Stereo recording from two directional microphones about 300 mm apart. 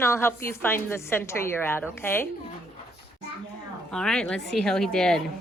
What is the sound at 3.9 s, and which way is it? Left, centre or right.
A woman's voice, centre.